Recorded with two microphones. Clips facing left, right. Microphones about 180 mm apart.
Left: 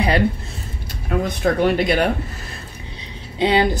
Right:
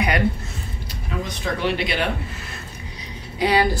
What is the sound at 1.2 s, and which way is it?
Speech, 50° left (ahead or behind).